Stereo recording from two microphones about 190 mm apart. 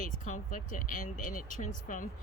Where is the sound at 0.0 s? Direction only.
45° left (ahead or behind).